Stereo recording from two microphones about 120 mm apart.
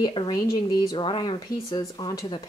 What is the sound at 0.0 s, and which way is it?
A woman's voice, 35° left (ahead or behind).